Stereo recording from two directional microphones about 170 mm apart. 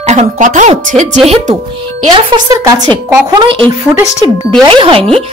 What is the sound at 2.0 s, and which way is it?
Speech, 25° right (ahead or behind).